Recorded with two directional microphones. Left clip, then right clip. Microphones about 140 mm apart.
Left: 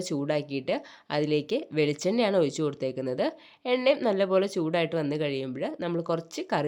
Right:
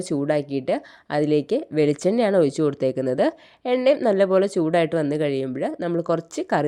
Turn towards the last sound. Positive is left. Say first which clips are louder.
# right 6 dB
turn(degrees=-40)  # may be behind; listen again after turning